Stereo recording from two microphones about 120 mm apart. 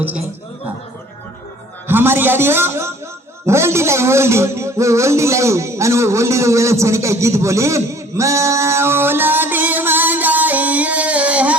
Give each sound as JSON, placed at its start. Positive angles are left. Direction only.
{"t": 1.9, "sound": "a man's voice", "side_deg": -20}